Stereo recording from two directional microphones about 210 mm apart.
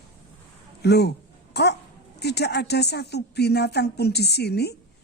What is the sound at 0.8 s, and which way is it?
A woman's voice, 50° left (ahead or behind).